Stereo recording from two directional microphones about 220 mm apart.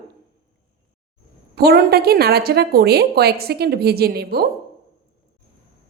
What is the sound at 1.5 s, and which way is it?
A woman's voice, 45° right (ahead or behind).